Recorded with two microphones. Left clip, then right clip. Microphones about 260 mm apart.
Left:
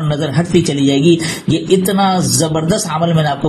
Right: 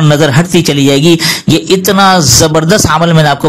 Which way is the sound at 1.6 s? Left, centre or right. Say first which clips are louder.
Right 6 dB; right.